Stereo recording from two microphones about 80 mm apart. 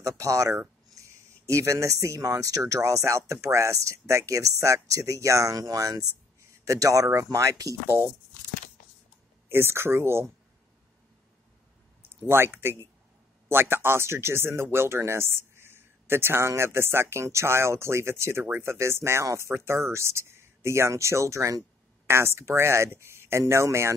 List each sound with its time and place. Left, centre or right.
0.0 s speech: right
7.8 s speech: right
9.5 s speech: right
12.1 s speech: right